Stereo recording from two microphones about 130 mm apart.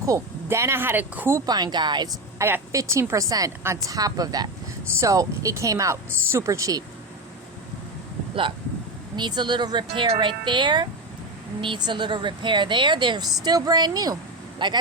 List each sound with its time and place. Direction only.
0.0 s a woman's voice: 25° right (ahead or behind)
1.5 s a woman's voice: 30° right (ahead or behind)
2.4 s a woman's voice: 20° right (ahead or behind)
9.1 s a woman's voice: 35° right (ahead or behind)